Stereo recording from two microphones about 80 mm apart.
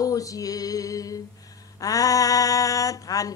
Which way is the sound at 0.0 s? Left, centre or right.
Left.